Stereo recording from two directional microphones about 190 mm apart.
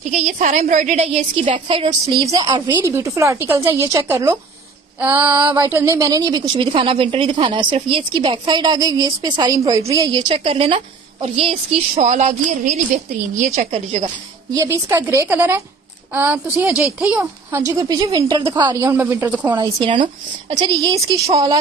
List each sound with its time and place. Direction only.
0.1 s a woman's voice: 40° right (ahead or behind)
14.5 s a woman's voice: 15° right (ahead or behind)